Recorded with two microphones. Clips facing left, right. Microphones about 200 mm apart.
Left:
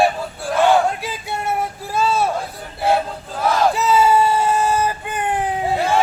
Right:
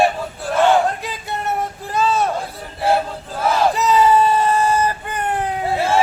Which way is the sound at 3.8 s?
5° left (ahead or behind).